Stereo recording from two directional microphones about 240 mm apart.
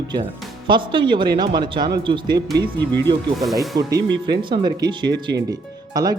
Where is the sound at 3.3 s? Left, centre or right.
Centre.